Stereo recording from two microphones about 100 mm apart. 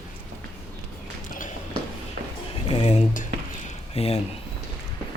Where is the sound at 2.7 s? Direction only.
75° left (ahead or behind).